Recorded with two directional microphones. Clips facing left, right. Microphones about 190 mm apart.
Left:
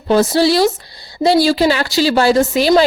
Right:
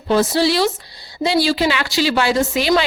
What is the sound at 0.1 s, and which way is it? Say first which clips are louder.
A woman's voice: left 4 dB; 40° left (ahead or behind).